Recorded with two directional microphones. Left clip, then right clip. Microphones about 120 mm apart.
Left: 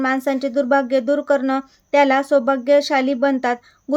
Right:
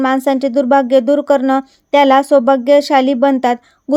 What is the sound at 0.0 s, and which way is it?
Speech, 55° right (ahead or behind).